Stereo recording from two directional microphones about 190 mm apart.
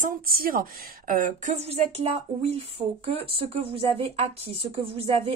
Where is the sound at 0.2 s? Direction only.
50° right (ahead or behind); by 2.6 s 35° right (ahead or behind).